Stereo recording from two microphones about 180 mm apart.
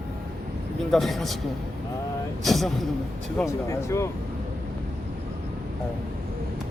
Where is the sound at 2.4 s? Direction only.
Centre (ahead or behind); by 4.0 s 15° left (ahead or behind).